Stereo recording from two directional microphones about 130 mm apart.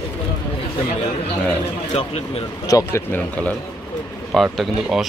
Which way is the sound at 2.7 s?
25° left (ahead or behind).